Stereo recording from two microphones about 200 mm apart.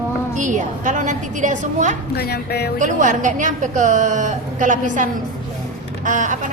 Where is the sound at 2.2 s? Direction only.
50° left (ahead or behind).